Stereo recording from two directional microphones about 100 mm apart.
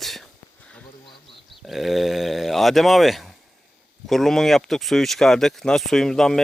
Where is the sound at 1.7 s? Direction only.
Centre (ahead or behind).